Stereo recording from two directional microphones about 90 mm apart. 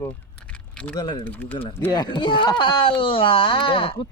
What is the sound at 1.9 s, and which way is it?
Speech, 55° left (ahead or behind).